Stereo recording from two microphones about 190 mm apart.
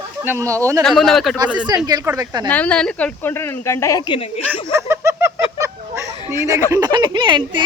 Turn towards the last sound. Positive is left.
turn(degrees=-25)  # may be behind; listen again after turning